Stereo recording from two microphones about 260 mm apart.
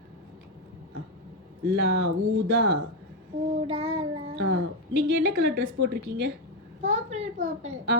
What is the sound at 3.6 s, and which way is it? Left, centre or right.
Child singing, right.